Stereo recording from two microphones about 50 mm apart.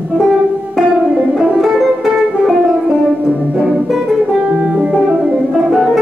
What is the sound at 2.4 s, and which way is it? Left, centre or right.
Music, right.